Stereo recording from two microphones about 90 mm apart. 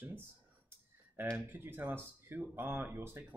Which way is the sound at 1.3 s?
25° right (ahead or behind).